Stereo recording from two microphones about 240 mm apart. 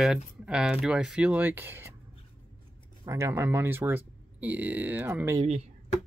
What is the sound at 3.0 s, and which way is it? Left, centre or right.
Speech, centre.